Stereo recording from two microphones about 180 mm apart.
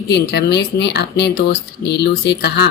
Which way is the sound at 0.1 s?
65° left (ahead or behind).